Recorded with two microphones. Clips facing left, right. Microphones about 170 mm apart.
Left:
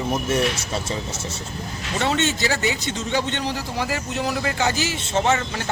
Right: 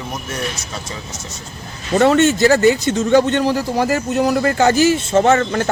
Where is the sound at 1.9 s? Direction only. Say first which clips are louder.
Right 10 dB; 50° right (ahead or behind).